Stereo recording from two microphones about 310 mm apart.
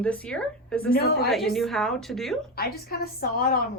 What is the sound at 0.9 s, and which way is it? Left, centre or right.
Speech, left.